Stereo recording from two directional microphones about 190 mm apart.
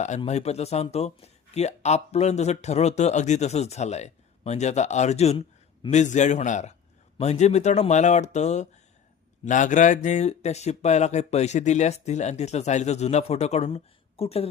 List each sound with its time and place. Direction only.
0.2 s speech: 35° left (ahead or behind)